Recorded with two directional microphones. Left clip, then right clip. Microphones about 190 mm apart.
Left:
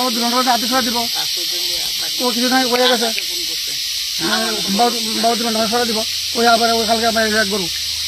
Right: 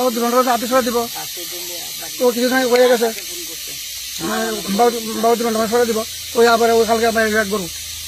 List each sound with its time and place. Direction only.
0.0 s speech: 15° right (ahead or behind)
2.2 s speech: 25° right (ahead or behind)
4.7 s speech: 20° right (ahead or behind)